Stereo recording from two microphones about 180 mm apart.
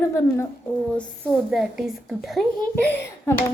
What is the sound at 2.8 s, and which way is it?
Speech, 10° left (ahead or behind).